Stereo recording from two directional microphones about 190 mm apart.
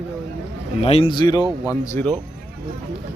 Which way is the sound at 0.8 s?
30° left (ahead or behind).